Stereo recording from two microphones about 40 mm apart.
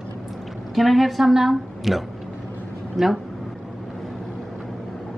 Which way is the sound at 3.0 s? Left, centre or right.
Centre.